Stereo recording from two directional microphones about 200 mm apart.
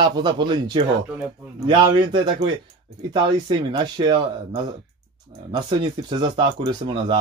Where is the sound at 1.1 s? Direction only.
5° right (ahead or behind).